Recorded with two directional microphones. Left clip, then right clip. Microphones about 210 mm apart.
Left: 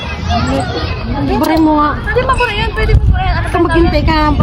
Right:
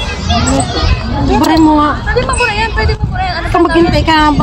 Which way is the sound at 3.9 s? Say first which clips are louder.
Right 4 dB; 35° right (ahead or behind).